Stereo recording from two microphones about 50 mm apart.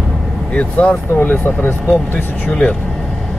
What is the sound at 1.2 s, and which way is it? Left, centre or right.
Speech, left.